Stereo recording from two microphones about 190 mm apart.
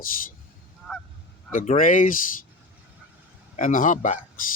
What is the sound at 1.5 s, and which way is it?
Speech, 45° left (ahead or behind).